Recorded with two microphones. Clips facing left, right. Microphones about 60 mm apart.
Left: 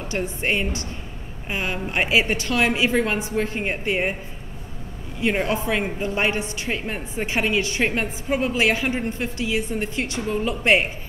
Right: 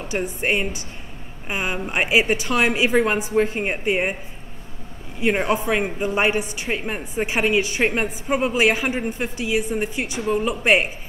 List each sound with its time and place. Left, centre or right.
0.1 s a woman's voice: centre
5.2 s a woman's voice: centre